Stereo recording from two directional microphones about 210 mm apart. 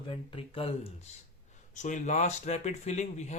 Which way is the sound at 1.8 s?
35° left (ahead or behind).